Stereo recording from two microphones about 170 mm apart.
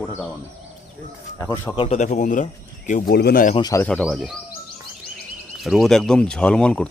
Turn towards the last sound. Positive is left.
turn(degrees=5)  # may be behind; listen again after turning